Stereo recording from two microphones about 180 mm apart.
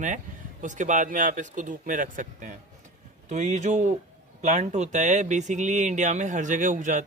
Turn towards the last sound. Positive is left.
turn(degrees=-45)  # may be behind; listen again after turning